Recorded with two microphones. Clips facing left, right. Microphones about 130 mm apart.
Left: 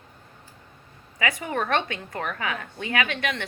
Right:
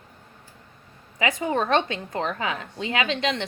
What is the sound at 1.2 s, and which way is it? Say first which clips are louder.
A woman's voice: right 3 dB; 20° right (ahead or behind).